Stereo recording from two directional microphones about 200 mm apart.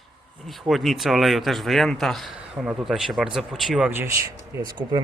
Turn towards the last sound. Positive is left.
turn(degrees=-20)  # may be behind; listen again after turning